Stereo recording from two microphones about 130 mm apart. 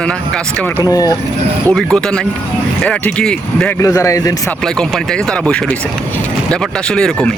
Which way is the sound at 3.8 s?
25° left (ahead or behind).